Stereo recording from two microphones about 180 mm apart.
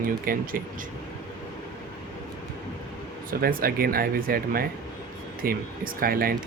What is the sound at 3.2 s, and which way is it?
Speech, 55° right (ahead or behind).